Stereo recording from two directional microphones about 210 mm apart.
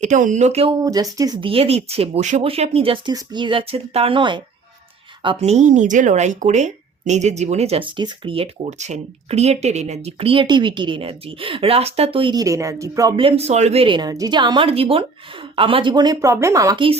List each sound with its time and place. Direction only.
0.0 s speech: 35° right (ahead or behind)
0.8 s speech: 15° right (ahead or behind)